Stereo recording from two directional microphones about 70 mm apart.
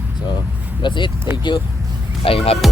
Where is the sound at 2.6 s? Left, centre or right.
Centre.